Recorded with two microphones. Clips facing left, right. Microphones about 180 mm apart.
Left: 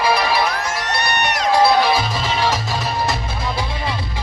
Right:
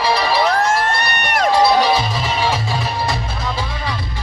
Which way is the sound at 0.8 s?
55° right (ahead or behind).